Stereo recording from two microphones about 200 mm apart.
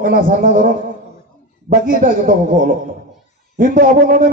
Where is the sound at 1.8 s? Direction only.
45° right (ahead or behind).